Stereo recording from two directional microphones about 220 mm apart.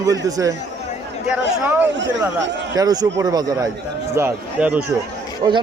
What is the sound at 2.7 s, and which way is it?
A man's voice, 15° right (ahead or behind).